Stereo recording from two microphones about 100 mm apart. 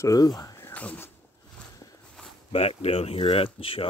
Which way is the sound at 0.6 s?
15° left (ahead or behind).